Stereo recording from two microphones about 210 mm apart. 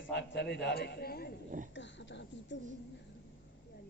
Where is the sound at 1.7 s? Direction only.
60° left (ahead or behind).